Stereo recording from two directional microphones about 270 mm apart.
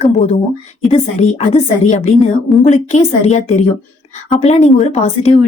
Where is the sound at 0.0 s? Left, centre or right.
Left.